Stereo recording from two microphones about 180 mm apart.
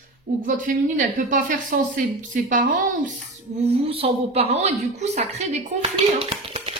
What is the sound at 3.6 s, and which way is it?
A woman's voice, 35° right (ahead or behind).